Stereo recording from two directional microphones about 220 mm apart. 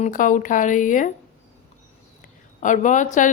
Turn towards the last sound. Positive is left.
turn(degrees=35)  # may be behind; listen again after turning